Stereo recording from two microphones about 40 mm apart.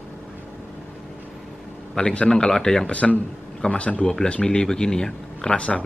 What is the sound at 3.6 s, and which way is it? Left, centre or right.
Speech, left.